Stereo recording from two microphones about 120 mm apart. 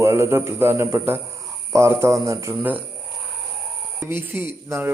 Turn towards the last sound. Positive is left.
turn(degrees=-20)  # may be behind; listen again after turning